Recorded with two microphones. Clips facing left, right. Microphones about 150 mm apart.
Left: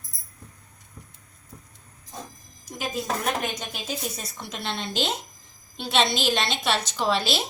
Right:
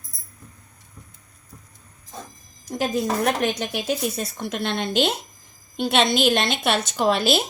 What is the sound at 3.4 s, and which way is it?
Speech, 70° right (ahead or behind).